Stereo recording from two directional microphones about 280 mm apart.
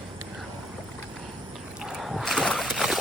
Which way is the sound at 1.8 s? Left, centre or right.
Centre.